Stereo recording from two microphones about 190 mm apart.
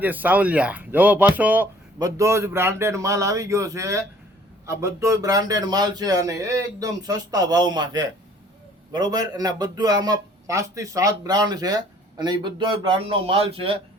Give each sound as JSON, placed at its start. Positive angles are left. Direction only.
{"t": 0.0, "sound": "a man's voice", "side_deg": -10}